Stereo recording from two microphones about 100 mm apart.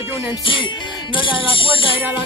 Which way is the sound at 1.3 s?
60° left (ahead or behind).